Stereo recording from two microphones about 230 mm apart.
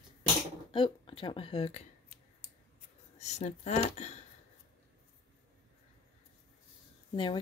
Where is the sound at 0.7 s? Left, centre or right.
Left.